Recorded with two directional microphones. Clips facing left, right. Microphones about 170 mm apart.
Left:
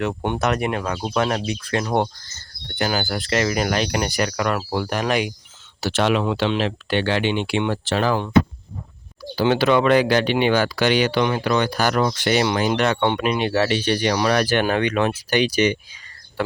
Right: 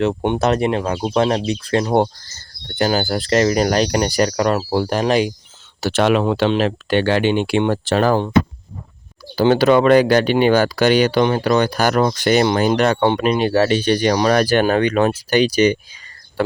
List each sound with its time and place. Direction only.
0.0 s speech: 25° right (ahead or behind)
5.8 s speech: 50° right (ahead or behind)
9.3 s speech: 40° right (ahead or behind)